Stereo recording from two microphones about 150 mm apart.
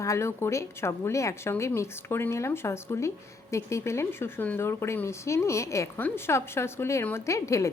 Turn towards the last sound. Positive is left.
turn(degrees=20)  # may be behind; listen again after turning